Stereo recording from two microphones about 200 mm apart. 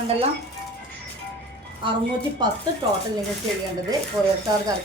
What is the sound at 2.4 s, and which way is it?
Speech, 20° right (ahead or behind).